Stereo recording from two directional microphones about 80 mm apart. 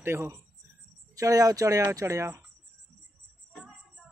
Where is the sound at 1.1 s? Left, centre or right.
Right.